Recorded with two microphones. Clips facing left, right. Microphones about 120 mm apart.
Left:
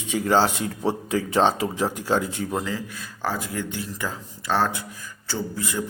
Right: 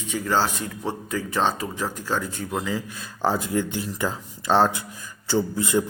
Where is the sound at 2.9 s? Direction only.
25° right (ahead or behind).